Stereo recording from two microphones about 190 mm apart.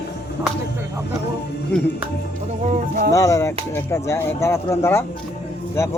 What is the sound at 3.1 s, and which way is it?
Speech, 15° left (ahead or behind).